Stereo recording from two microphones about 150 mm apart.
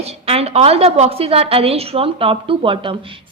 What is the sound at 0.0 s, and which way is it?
A woman's voice, 45° right (ahead or behind).